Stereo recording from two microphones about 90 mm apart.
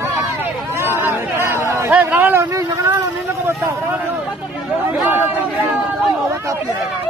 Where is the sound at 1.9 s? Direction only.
20° right (ahead or behind).